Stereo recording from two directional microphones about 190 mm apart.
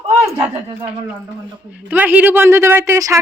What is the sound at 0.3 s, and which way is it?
Speech, 30° right (ahead or behind).